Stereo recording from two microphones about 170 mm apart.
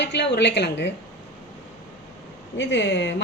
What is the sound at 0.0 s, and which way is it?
Speech, 90° left.